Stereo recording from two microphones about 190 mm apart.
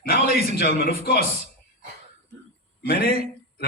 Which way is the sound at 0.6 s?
50° left (ahead or behind).